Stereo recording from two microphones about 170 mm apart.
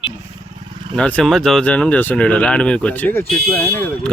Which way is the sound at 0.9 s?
5° left (ahead or behind).